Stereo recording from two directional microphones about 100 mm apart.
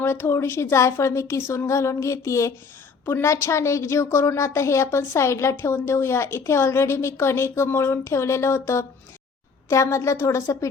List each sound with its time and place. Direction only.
0.0 s a woman's voice: 25° left (ahead or behind)